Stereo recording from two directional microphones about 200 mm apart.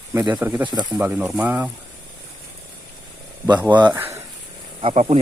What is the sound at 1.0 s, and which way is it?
Speech, 5° right (ahead or behind).